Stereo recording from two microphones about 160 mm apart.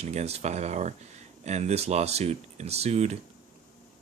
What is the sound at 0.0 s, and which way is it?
Speech, 45° right (ahead or behind).